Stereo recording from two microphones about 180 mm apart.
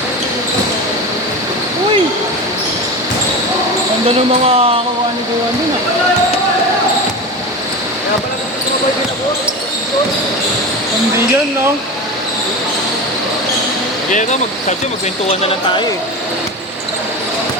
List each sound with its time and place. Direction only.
4.4 s speech: 35° right (ahead or behind)
14.1 s speech: 40° left (ahead or behind)
15.3 s speech: 30° left (ahead or behind)